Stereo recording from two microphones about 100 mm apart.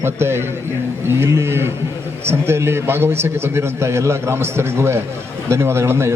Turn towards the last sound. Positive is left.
turn(degrees=-25)  # may be behind; listen again after turning